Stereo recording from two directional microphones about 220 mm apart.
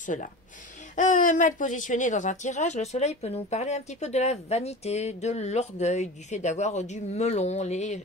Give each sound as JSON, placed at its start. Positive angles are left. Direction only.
{"t": 0.0, "sound": "speech", "side_deg": 35}